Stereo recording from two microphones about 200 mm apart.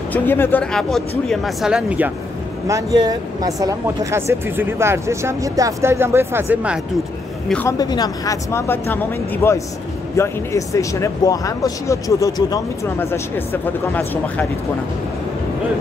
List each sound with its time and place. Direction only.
0.1 s speech: 10° left (ahead or behind); by 2.1 s 5° right (ahead or behind)
2.7 s speech: 20° right (ahead or behind)
7.4 s speech: 5° left (ahead or behind)
7.8 s speech: 20° left (ahead or behind)